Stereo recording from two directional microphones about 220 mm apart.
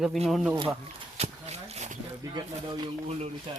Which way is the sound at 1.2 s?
30° right (ahead or behind).